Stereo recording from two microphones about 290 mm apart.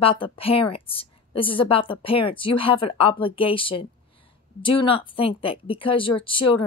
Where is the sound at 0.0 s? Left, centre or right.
Centre.